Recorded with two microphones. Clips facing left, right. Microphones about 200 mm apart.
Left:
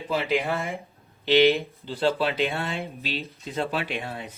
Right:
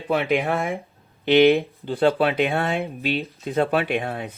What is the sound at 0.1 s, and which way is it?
Speech, 55° right (ahead or behind).